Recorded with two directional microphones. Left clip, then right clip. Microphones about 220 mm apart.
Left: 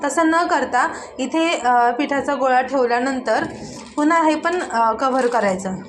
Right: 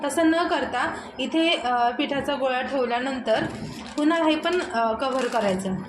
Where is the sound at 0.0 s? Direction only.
10° left (ahead or behind).